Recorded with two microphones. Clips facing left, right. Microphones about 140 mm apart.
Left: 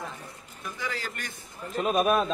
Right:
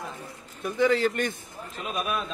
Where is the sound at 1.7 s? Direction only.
45° left (ahead or behind).